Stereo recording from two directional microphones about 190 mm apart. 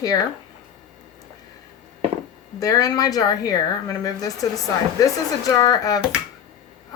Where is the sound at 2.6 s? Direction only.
20° left (ahead or behind).